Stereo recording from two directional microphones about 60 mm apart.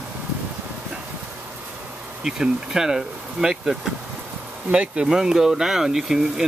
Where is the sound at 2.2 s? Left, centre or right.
Centre.